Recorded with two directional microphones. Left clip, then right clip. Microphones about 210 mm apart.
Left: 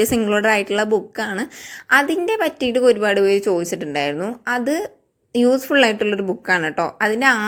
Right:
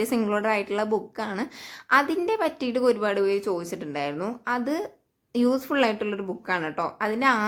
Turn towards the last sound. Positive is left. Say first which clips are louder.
# left 7 dB
turn(degrees=15)  # may be behind; listen again after turning